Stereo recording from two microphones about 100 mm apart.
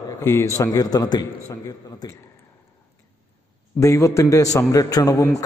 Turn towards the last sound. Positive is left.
turn(degrees=35)  # may be behind; listen again after turning